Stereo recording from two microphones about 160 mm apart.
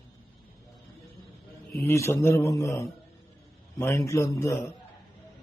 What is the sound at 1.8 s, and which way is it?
A man's voice, 20° left (ahead or behind).